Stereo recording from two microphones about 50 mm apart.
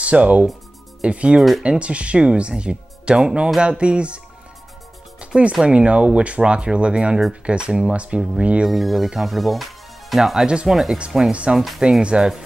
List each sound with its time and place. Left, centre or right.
0.0 s speech: right
5.2 s speech: right
7.9 s speech: right
8.6 s speech: centre
10.4 s speech: centre
10.7 s speech: centre
11.5 s speech: centre
12.0 s speech: right